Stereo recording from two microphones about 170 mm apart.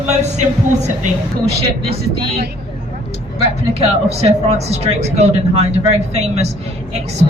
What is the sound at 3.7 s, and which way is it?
Speech, 40° right (ahead or behind).